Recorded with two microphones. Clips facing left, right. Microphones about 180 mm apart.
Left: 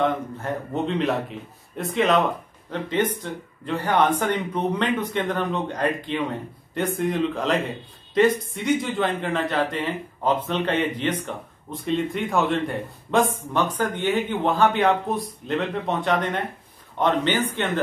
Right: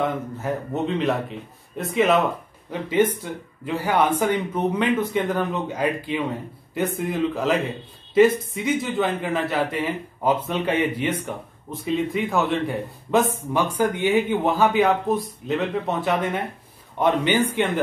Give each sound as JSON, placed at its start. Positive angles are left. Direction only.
{"t": 0.0, "sound": "speech", "side_deg": -5}